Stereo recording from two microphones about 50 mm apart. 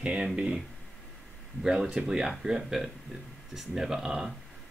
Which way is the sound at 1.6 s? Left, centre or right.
Centre.